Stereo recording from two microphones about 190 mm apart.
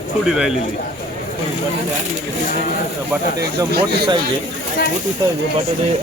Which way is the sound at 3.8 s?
25° right (ahead or behind).